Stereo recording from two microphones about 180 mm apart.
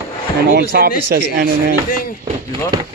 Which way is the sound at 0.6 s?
60° right (ahead or behind).